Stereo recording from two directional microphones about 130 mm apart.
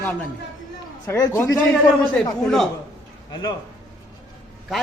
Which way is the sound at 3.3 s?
30° left (ahead or behind).